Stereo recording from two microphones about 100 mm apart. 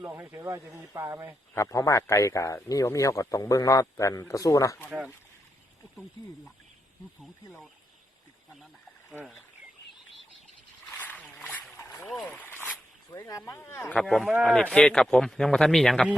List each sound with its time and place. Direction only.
0.0 s speech: 25° right (ahead or behind)
1.5 s speech: 30° left (ahead or behind)
4.9 s speech: 10° right (ahead or behind)
7.2 s speech: centre (ahead or behind)
10.9 s a sound: 15° left (ahead or behind)
13.2 s speech: 30° left (ahead or behind)
13.7 s speech: 15° left (ahead or behind)
14.0 s speech: centre (ahead or behind)